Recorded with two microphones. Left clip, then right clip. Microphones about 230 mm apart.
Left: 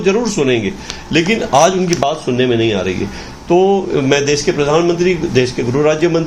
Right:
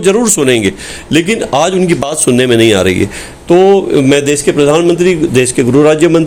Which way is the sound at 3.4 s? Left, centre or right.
Right.